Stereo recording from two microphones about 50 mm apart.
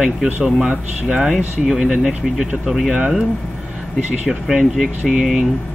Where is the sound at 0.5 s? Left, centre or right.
Centre.